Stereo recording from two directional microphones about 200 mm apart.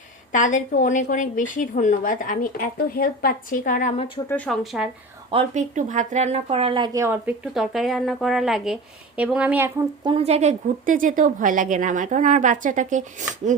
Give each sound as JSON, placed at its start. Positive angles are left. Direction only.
{"t": 0.3, "sound": "a woman's voice", "side_deg": 40}
{"t": 4.3, "sound": "speech", "side_deg": 5}
{"t": 5.3, "sound": "speech", "side_deg": -35}
{"t": 10.0, "sound": "a woman's voice", "side_deg": -25}